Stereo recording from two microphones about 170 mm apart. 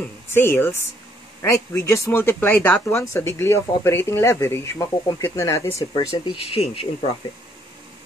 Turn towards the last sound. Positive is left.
turn(degrees=35)  # may be behind; listen again after turning